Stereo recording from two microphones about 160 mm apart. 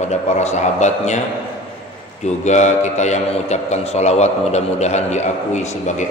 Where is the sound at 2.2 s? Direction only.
45° left (ahead or behind).